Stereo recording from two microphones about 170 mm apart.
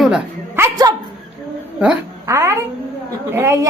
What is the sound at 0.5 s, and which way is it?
A woman's voice, 20° right (ahead or behind).